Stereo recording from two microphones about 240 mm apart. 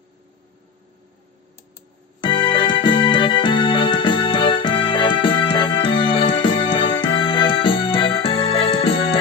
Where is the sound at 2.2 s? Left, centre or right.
Centre.